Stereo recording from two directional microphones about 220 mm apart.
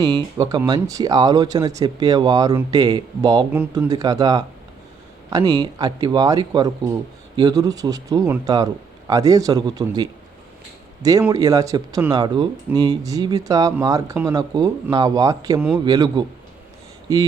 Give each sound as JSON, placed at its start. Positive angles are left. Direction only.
{"t": 0.3, "sound": "speech", "side_deg": -15}
{"t": 13.1, "sound": "a man's voice", "side_deg": -15}